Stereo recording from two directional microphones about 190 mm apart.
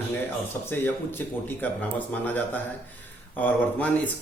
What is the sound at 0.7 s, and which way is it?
Speech, 10° left (ahead or behind).